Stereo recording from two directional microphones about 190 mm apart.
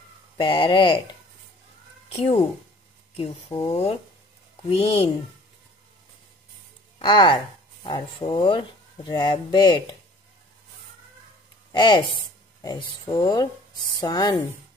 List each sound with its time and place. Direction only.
0.4 s speech: 25° left (ahead or behind)
2.1 s speech: 35° left (ahead or behind)
7.0 s speech: 25° left (ahead or behind)
11.7 s speech: 25° left (ahead or behind)